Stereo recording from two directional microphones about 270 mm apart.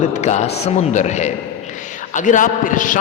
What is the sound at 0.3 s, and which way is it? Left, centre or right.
A man's voice, left.